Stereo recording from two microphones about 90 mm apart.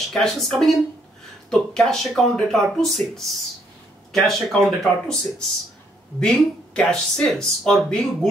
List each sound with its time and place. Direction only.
0.1 s speech: 5° left (ahead or behind)
6.1 s speech: 10° left (ahead or behind)